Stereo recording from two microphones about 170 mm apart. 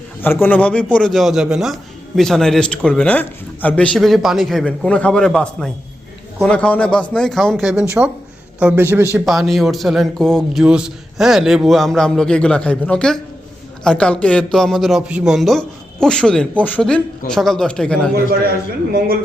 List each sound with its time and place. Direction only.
0.2 s a man's voice: 10° left (ahead or behind); by 9.0 s 10° right (ahead or behind)
9.1 s a man's voice: centre (ahead or behind)
18.1 s a man's voice: 65° right (ahead or behind)